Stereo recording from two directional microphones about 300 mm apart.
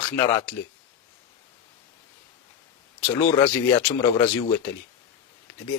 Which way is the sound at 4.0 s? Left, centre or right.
Centre.